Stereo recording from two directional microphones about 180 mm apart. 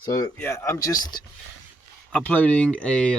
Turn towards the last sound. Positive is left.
turn(degrees=5)  # may be behind; listen again after turning